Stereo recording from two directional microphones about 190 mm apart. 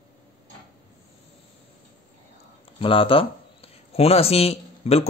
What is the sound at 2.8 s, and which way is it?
Speech, 30° left (ahead or behind).